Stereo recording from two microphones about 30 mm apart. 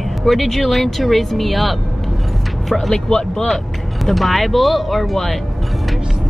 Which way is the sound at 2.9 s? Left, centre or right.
Left.